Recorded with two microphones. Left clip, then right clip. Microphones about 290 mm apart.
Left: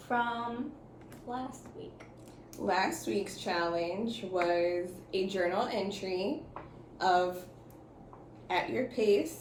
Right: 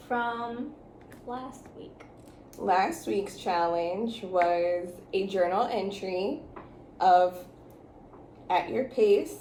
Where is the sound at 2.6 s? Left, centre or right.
Centre.